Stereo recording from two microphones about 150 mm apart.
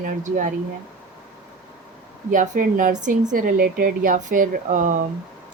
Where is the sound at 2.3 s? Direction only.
60° right (ahead or behind).